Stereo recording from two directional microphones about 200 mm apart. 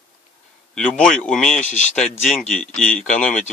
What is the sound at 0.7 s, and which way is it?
Speech, 5° left (ahead or behind).